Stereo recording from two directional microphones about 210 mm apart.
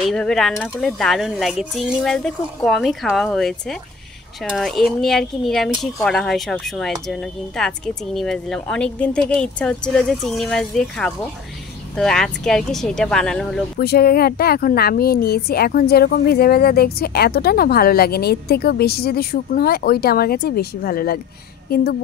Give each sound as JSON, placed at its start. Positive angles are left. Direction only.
{"t": 0.0, "sound": "speech", "side_deg": 0}
{"t": 13.7, "sound": "a woman's voice", "side_deg": 45}